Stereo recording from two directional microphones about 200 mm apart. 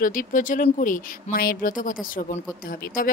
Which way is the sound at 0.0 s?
45° left (ahead or behind).